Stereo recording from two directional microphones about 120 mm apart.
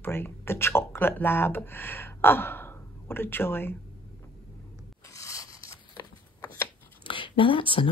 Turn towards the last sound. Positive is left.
turn(degrees=45)  # may be behind; listen again after turning